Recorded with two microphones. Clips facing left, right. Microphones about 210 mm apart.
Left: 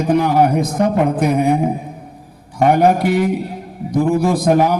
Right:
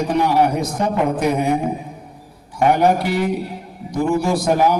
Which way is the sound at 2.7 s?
55° left (ahead or behind).